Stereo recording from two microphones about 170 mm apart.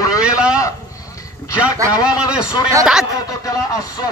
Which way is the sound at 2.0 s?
5° right (ahead or behind).